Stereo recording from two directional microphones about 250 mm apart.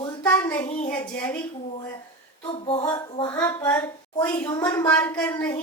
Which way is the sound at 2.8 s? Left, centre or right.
Centre.